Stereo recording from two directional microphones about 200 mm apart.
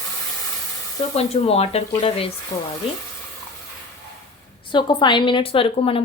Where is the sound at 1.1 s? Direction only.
30° left (ahead or behind).